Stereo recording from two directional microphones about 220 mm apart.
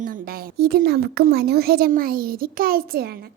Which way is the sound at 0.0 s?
40° right (ahead or behind).